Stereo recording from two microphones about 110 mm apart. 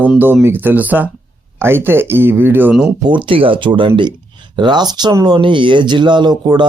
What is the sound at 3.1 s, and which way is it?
Speech, 50° right (ahead or behind).